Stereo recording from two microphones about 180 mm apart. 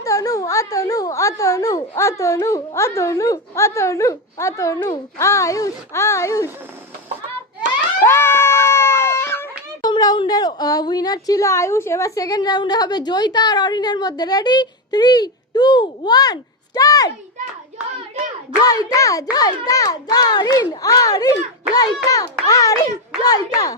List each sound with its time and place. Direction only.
0.0 s speech: 20° left (ahead or behind)
8.0 s a sound: 15° left (ahead or behind)
9.9 s a woman's voice: 25° left (ahead or behind)
18.6 s a woman's voice: 20° left (ahead or behind)